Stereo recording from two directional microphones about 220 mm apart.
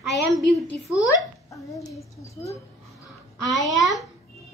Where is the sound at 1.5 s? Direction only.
15° left (ahead or behind).